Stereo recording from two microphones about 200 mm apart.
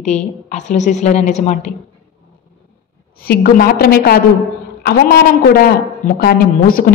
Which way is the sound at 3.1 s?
50° left (ahead or behind).